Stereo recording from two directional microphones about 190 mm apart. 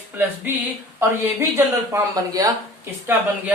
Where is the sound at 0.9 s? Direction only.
15° right (ahead or behind).